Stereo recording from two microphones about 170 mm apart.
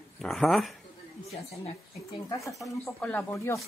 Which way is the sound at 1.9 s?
20° left (ahead or behind).